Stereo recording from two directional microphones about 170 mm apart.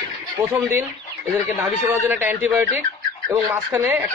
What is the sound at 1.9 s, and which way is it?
Speech, 10° right (ahead or behind).